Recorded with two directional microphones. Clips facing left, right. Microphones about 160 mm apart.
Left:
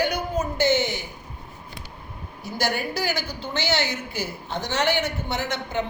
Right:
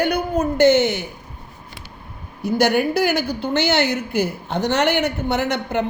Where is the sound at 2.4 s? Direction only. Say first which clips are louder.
Right 9 dB; 60° right (ahead or behind).